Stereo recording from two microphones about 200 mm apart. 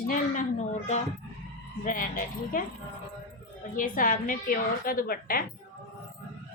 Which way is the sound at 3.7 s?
45° left (ahead or behind).